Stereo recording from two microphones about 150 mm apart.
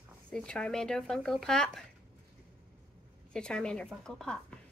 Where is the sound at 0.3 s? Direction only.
5° left (ahead or behind).